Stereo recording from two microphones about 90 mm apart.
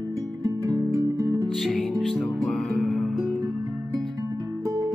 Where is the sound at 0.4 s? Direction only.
40° right (ahead or behind).